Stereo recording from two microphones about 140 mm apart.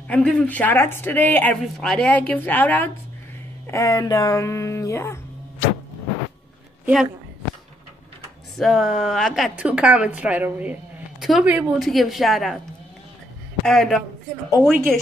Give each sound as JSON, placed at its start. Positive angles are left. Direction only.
{"t": 0.1, "sound": "a woman's voice", "side_deg": 5}
{"t": 8.5, "sound": "a woman's voice", "side_deg": 0}
{"t": 13.7, "sound": "speech", "side_deg": 0}